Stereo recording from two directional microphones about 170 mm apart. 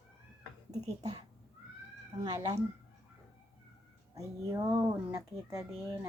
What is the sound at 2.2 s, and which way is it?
Speech, 25° right (ahead or behind).